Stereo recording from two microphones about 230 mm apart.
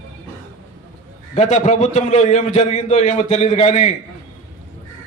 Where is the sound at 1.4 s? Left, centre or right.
Left.